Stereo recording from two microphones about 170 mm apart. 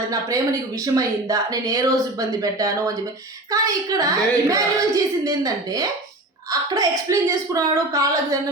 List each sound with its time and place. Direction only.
0.1 s speech: 20° right (ahead or behind)